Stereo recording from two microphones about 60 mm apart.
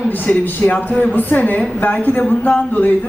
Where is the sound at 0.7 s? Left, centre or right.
Left.